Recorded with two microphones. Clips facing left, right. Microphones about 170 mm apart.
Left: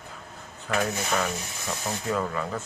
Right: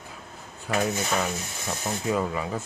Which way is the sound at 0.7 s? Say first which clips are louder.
Right 1 dB; 10° right (ahead or behind).